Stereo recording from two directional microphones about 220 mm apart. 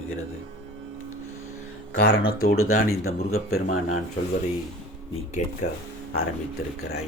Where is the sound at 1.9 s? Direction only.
45° left (ahead or behind).